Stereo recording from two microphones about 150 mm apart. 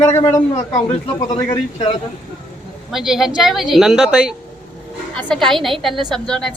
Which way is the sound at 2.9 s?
Centre (ahead or behind).